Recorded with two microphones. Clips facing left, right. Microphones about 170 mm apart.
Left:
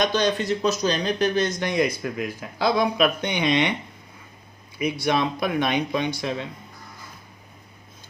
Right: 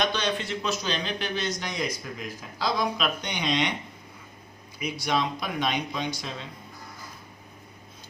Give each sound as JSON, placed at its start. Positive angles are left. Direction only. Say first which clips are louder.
{"t": 0.0, "sound": "speech", "louder": "left 5 dB", "side_deg": 45}
{"t": 4.8, "sound": "speech", "louder": "left 5 dB", "side_deg": 60}